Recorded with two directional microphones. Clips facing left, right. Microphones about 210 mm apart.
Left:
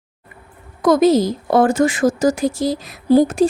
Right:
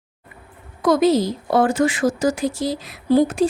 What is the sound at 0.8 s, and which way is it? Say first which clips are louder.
Speech: left 3 dB; 45° left (ahead or behind).